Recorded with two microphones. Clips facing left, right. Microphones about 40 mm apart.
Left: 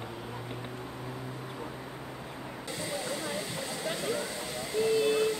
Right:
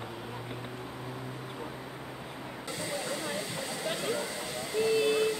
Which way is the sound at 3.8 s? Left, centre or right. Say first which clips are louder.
Even; centre.